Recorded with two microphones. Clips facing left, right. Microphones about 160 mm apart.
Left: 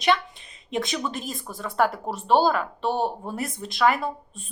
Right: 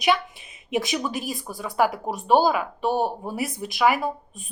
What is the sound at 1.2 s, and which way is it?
A woman's voice, centre (ahead or behind).